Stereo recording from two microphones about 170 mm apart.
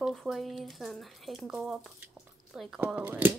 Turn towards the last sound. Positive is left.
turn(degrees=-10)  # may be behind; listen again after turning